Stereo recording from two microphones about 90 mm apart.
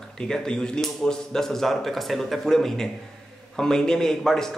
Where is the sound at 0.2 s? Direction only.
10° left (ahead or behind).